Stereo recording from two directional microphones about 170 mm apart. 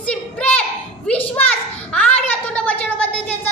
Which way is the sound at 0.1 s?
5° left (ahead or behind).